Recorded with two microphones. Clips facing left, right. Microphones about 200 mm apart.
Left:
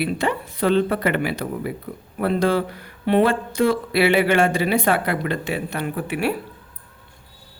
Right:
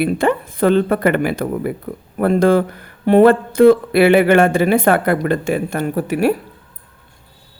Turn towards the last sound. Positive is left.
turn(degrees=-40)  # may be behind; listen again after turning